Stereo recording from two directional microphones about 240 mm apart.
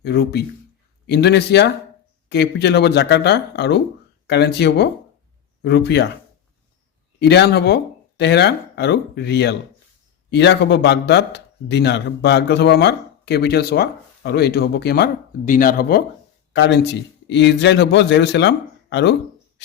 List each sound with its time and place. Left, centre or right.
0.0 s a man's voice: left
7.2 s a man's voice: left